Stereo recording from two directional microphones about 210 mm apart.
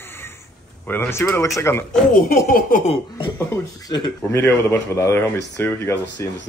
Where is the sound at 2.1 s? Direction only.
40° left (ahead or behind).